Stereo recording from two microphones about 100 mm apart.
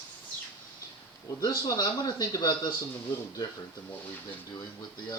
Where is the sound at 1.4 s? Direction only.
40° left (ahead or behind).